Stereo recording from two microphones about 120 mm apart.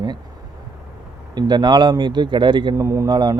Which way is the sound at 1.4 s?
35° right (ahead or behind).